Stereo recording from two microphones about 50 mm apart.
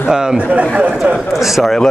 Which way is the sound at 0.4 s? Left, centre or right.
Right.